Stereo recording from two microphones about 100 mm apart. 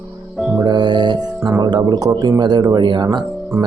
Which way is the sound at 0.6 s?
45° right (ahead or behind).